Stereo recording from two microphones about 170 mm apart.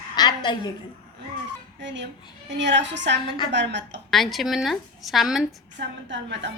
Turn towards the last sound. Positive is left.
turn(degrees=-90)